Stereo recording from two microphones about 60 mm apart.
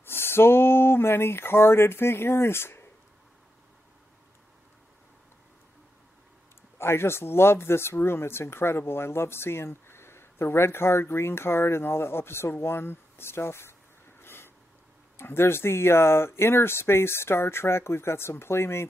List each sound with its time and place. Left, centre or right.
0.0 s speech: left
6.8 s speech: left
14.2 s a sound: left
15.1 s speech: left